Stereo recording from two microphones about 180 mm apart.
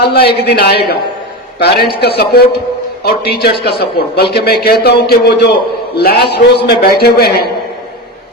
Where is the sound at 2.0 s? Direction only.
60° left (ahead or behind).